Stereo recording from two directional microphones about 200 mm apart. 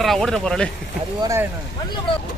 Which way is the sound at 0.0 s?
Centre (ahead or behind).